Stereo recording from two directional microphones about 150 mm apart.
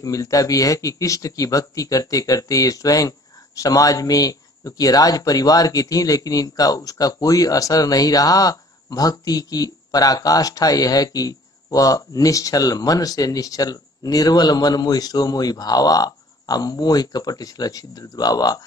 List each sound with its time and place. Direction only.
0.0 s speech: 20° left (ahead or behind)